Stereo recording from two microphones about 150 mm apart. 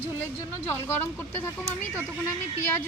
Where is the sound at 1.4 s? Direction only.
15° left (ahead or behind).